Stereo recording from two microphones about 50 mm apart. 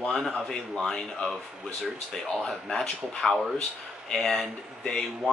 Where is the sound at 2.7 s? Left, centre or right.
Centre.